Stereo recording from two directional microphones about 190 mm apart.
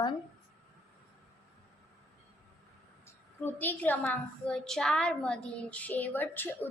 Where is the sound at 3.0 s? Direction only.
10° left (ahead or behind).